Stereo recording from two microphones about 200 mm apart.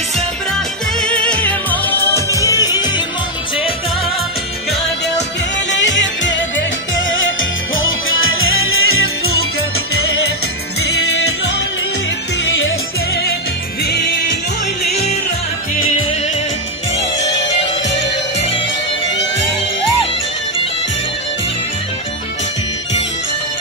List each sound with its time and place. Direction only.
1.0 s music: 5° left (ahead or behind)
5.7 s music: 65° left (ahead or behind); by 9.3 s 90° left
12.4 s music: 65° left (ahead or behind)
17.2 s music: 65° left (ahead or behind)